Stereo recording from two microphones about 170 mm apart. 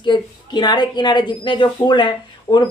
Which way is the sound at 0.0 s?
25° left (ahead or behind).